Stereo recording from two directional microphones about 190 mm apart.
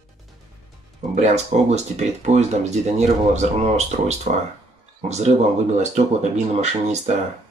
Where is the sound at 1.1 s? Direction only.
35° right (ahead or behind).